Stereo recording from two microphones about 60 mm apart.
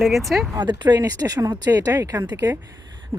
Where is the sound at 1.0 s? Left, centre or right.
Right.